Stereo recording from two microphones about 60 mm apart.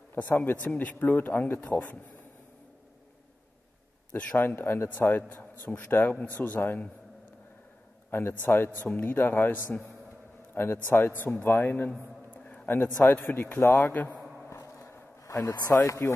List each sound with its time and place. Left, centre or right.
0.1 s speech: left
4.2 s speech: left
4.5 s a man's voice: left
4.8 s speech: left
8.1 s a man's voice: left
10.5 s a man's voice: left
12.4 s a sound: left
12.6 s a man's voice: left
15.2 s speech: left